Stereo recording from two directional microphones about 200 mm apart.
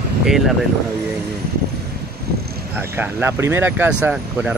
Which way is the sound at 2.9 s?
10° right (ahead or behind).